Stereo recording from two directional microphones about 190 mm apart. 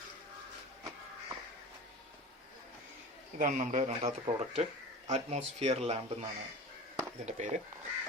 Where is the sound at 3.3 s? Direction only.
40° right (ahead or behind).